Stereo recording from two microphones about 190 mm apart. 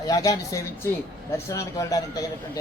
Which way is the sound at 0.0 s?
20° left (ahead or behind).